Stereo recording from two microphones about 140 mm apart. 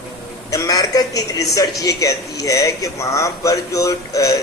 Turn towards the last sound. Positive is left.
turn(degrees=25)  # may be behind; listen again after turning